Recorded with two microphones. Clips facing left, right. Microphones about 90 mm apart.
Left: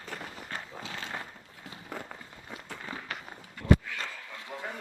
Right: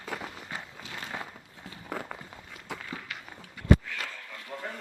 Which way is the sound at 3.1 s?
40° left (ahead or behind).